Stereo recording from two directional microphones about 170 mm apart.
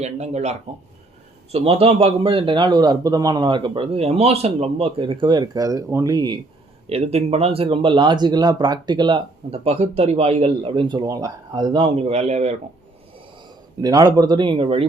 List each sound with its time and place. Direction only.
0.0 s speech: 40° right (ahead or behind)
1.5 s a man's voice: 35° right (ahead or behind)
6.8 s speech: 35° right (ahead or behind)
13.8 s a man's voice: 20° right (ahead or behind)